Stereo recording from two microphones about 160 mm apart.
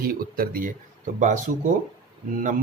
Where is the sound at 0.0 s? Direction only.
70° right (ahead or behind).